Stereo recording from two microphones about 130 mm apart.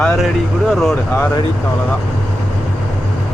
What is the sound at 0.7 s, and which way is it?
Speech, centre (ahead or behind).